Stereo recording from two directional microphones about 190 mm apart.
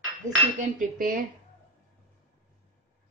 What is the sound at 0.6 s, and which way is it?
Speech, 45° right (ahead or behind).